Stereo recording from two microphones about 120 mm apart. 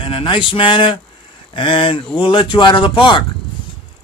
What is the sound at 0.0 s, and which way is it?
A man's voice, 45° left (ahead or behind).